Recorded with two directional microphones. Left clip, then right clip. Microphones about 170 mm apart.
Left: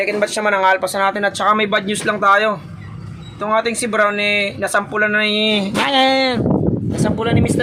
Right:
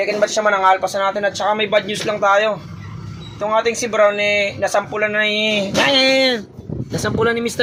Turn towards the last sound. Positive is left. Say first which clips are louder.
# even
turn(degrees=0)  # may be behind; listen again after turning